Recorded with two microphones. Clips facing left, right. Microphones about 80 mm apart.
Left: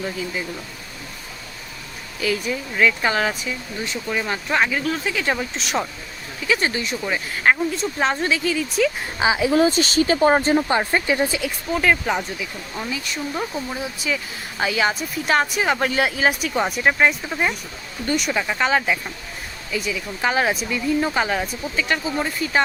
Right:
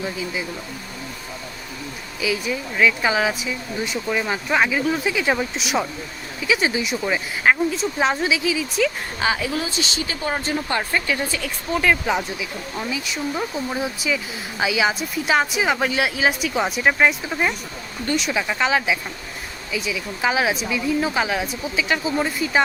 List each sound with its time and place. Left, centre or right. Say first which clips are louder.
0.0 s speech: even; centre
2.2 s speech: even; centre
9.1 s a woman's voice: left 5 dB; centre
9.5 s speech: left 8 dB; left
10.7 s speech: left 3 dB; left
11.3 s speech: left 1 dB; centre
14.6 s speech: even; centre